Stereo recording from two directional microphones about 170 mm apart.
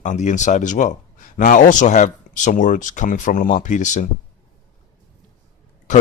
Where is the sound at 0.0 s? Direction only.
45° left (ahead or behind).